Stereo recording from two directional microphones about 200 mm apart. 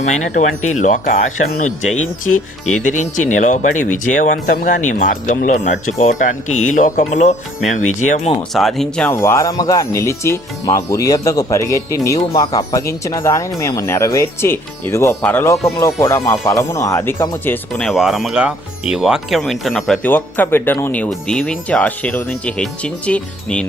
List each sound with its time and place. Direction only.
0.8 s speech: 40° left (ahead or behind)
8.2 s speech: 25° left (ahead or behind)
8.5 s speech: centre (ahead or behind)
9.1 s speech: 15° left (ahead or behind)